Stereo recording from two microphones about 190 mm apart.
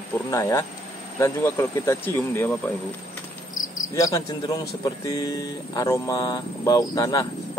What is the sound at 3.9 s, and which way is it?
Speech, 15° left (ahead or behind).